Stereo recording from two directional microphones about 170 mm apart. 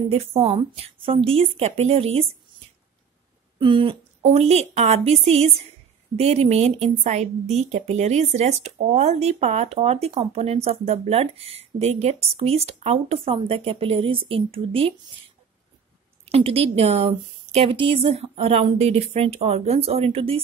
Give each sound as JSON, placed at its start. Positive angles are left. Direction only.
{"t": 0.1, "sound": "a woman's voice", "side_deg": -35}
{"t": 3.5, "sound": "a woman's voice", "side_deg": -30}
{"t": 16.3, "sound": "a woman's voice", "side_deg": -35}